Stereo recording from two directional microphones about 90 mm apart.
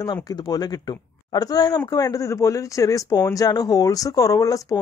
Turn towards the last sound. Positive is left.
turn(degrees=40)  # may be behind; listen again after turning